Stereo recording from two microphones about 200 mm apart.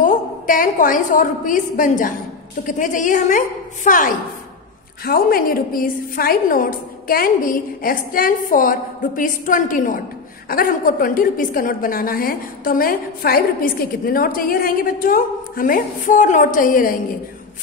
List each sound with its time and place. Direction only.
0.0 s a woman's voice: 40° left (ahead or behind)